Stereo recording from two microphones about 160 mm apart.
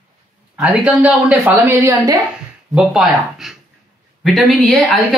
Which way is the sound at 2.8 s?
5° right (ahead or behind).